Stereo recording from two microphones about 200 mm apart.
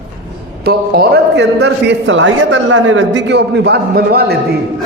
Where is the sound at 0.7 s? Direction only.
50° right (ahead or behind).